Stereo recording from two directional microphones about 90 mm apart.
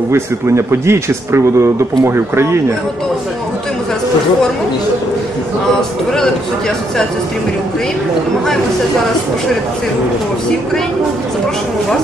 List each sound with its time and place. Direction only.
0.1 s speech: 30° right (ahead or behind)